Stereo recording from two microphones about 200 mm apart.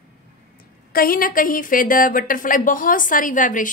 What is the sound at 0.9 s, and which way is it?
A woman's voice, 45° left (ahead or behind).